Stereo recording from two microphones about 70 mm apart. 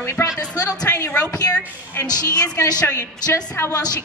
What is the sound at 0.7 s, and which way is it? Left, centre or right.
Speech, centre.